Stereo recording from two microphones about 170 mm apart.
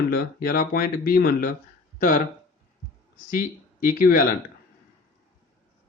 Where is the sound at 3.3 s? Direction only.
55° left (ahead or behind).